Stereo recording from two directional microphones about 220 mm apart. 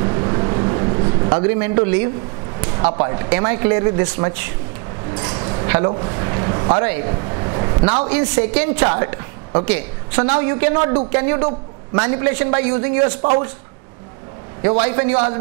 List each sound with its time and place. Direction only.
0.0 s vehicle: 25° right (ahead or behind)
1.6 s speech: 15° right (ahead or behind)
14.6 s speech: 20° right (ahead or behind)